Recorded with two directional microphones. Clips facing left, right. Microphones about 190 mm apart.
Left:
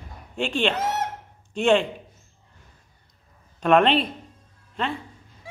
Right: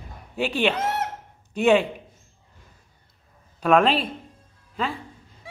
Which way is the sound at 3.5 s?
Centre (ahead or behind).